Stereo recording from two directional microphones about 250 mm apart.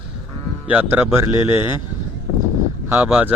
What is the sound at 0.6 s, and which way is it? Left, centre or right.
Speech, centre.